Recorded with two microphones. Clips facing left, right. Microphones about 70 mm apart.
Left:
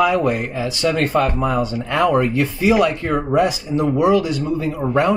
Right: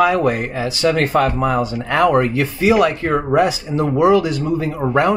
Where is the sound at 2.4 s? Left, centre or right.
Right.